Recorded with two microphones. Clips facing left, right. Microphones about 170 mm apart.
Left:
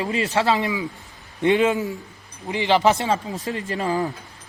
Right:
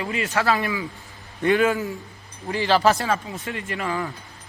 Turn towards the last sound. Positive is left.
turn(degrees=35)  # may be behind; listen again after turning